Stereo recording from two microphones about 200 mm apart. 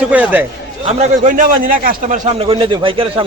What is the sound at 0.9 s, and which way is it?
A man's voice, 40° right (ahead or behind).